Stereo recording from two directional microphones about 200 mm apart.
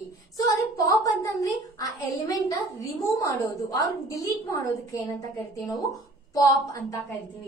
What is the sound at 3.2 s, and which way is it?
A woman's voice, 15° left (ahead or behind).